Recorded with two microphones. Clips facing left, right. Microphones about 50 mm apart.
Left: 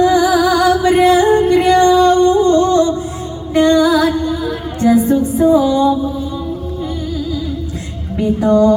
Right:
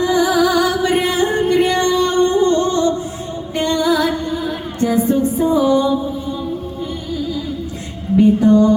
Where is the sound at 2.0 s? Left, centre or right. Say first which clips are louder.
Left 4 dB; right.